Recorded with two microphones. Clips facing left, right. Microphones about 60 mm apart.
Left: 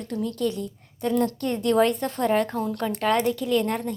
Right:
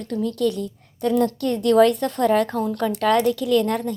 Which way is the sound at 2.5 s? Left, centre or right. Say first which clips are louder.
Right 4 dB; left.